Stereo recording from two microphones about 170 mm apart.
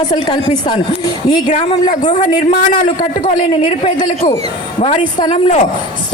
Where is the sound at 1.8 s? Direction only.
45° left (ahead or behind).